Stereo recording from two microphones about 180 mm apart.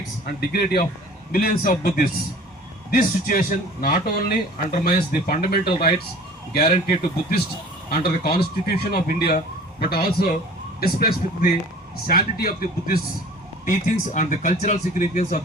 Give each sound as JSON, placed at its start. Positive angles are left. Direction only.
{"t": 0.3, "sound": "speech", "side_deg": 60}
{"t": 7.9, "sound": "speech", "side_deg": 60}
{"t": 13.7, "sound": "speech", "side_deg": 45}